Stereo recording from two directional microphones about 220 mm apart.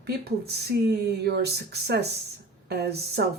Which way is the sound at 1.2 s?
45° right (ahead or behind).